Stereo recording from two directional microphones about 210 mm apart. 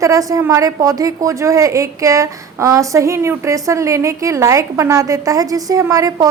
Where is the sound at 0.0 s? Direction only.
15° right (ahead or behind).